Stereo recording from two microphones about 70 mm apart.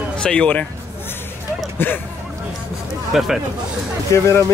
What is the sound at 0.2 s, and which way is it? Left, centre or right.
Speech, centre.